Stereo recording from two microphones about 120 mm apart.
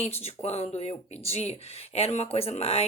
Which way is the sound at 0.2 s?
60° left (ahead or behind).